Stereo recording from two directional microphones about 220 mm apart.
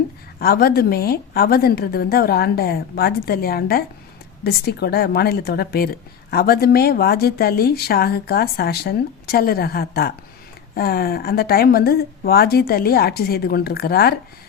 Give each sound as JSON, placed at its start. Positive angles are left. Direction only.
{"t": 0.3, "sound": "a woman's voice", "side_deg": 45}